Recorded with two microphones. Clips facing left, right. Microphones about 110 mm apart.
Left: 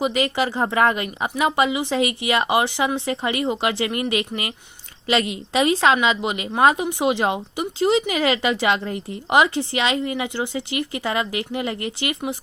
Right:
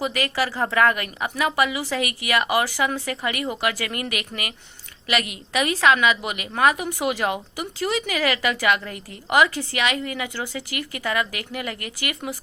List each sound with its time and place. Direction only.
0.0 s a woman's voice: 20° left (ahead or behind)